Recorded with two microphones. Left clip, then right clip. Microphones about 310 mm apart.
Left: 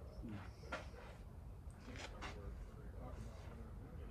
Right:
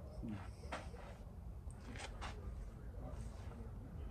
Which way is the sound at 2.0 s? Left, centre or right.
Right.